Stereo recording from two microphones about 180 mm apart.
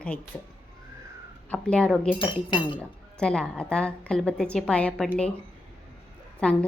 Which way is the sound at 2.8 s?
5° left (ahead or behind).